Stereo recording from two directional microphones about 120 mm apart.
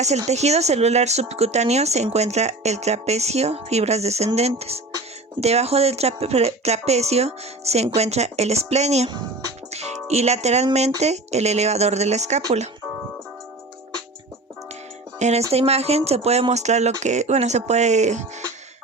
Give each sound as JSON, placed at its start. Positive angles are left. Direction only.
{"t": 0.3, "sound": "speech", "side_deg": -65}
{"t": 15.2, "sound": "speech", "side_deg": -65}